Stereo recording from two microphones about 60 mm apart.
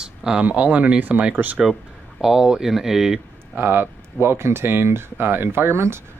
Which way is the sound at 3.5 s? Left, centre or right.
Right.